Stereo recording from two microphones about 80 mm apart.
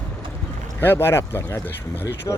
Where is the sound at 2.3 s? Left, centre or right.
Left.